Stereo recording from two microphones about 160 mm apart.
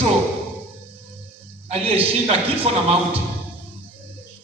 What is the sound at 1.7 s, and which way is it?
Speech, 40° right (ahead or behind).